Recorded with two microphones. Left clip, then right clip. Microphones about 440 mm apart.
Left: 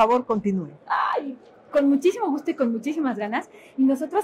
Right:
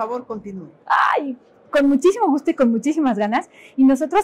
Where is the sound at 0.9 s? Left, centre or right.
Right.